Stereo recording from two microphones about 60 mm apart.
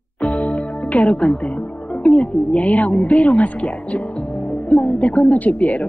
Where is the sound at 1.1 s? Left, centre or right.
Centre.